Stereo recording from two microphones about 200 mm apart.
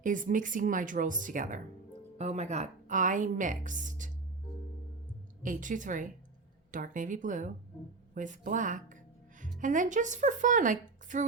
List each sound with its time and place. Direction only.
0.0 s a woman's voice: 40° right (ahead or behind)
5.4 s a woman's voice: 40° right (ahead or behind)